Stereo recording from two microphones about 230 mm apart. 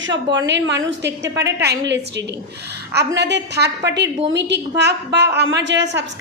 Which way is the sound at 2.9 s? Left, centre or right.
Right.